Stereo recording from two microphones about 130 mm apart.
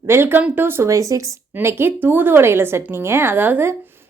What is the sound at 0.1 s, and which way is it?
A woman's voice, 15° right (ahead or behind).